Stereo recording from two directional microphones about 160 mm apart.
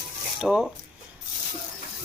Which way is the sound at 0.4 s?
Centre (ahead or behind).